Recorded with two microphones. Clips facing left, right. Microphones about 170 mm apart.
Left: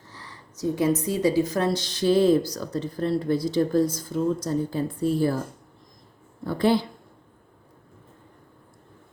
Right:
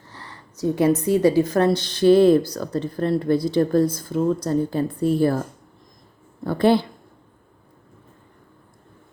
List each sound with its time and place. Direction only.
0.1 s a woman's voice: 60° right (ahead or behind)
6.4 s speech: 55° right (ahead or behind)